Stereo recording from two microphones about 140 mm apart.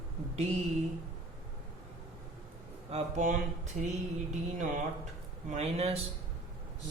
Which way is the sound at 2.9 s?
60° right (ahead or behind).